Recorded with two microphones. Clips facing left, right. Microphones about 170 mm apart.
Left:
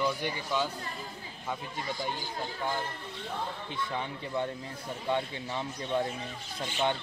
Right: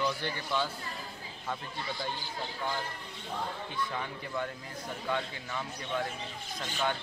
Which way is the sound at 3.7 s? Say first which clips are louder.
Left 1 dB; 25° left (ahead or behind).